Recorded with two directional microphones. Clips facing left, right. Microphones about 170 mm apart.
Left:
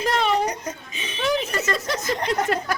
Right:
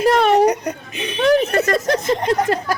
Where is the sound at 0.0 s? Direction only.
60° right (ahead or behind).